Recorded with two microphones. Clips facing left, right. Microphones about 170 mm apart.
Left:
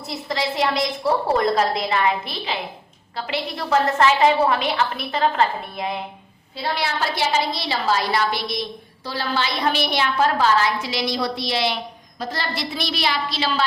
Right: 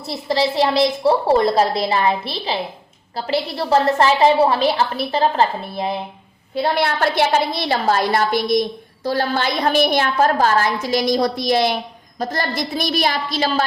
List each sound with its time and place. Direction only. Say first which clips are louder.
0.1 s a woman's voice: right 6 dB; 30° right (ahead or behind)
6.6 s a woman's voice: right 6 dB; 55° right (ahead or behind)